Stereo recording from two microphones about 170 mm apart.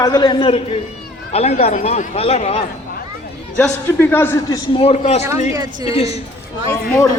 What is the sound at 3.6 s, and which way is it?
A man's voice, 10° left (ahead or behind).